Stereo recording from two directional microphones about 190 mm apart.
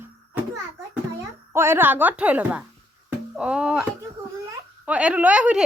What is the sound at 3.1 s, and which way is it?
Music, 5° right (ahead or behind).